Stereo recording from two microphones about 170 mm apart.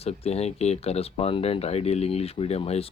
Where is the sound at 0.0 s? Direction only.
35° left (ahead or behind).